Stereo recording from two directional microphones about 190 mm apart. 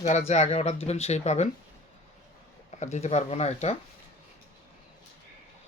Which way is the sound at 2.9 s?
35° left (ahead or behind).